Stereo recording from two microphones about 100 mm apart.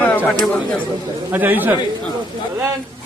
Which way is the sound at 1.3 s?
20° right (ahead or behind).